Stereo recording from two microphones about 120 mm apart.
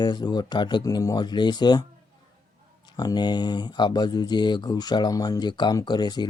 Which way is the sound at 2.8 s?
35° left (ahead or behind).